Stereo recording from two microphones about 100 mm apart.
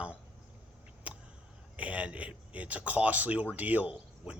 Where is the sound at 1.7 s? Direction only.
15° right (ahead or behind).